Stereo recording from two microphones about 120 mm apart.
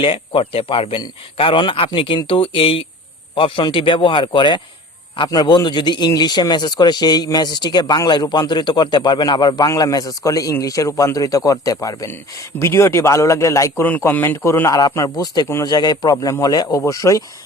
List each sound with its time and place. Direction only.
0.0 s a man's voice: 45° left (ahead or behind); by 17.2 s 25° left (ahead or behind)